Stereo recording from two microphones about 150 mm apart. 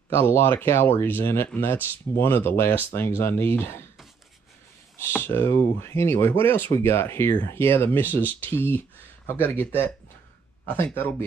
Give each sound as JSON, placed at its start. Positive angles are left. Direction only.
{"t": 0.1, "sound": "speech", "side_deg": 15}
{"t": 4.9, "sound": "speech", "side_deg": 15}
{"t": 10.7, "sound": "speech", "side_deg": 15}